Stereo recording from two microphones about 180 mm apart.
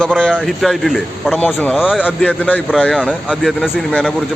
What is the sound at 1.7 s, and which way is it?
Speech, 5° right (ahead or behind).